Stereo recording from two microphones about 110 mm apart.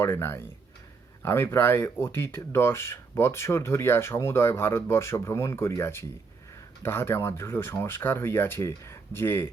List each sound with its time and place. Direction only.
0.0 s speech: 20° left (ahead or behind)